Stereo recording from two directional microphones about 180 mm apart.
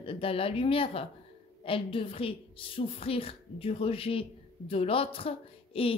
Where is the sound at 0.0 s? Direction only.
30° left (ahead or behind).